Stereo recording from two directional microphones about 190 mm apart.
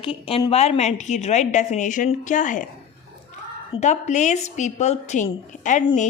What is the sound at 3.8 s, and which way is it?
A woman's voice, 40° left (ahead or behind).